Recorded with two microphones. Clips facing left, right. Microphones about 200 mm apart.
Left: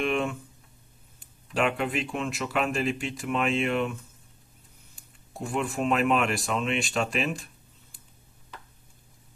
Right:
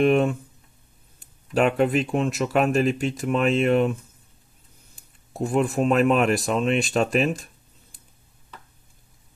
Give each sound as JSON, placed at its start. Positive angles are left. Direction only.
{"t": 0.0, "sound": "speech", "side_deg": -40}
{"t": 1.5, "sound": "speech", "side_deg": -40}
{"t": 5.5, "sound": "speech", "side_deg": -40}